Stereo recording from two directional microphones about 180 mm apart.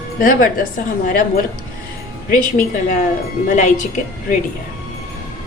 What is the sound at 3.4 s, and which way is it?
Speech, 45° left (ahead or behind).